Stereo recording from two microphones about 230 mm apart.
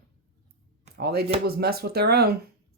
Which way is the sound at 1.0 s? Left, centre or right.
Right.